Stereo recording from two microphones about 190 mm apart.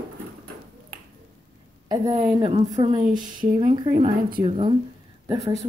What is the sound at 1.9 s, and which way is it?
A woman's voice, 20° right (ahead or behind).